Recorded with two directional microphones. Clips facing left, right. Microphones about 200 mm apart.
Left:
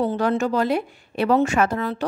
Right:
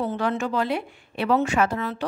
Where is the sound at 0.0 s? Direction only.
35° left (ahead or behind).